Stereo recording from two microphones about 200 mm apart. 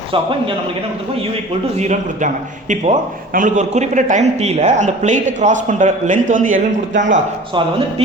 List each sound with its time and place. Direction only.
1.8 s a man's voice: 35° right (ahead or behind)